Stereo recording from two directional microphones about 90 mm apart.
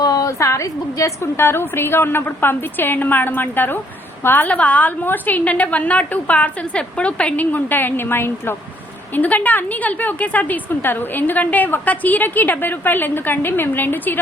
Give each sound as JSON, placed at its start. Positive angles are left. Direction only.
{"t": 0.0, "sound": "a woman's voice", "side_deg": 45}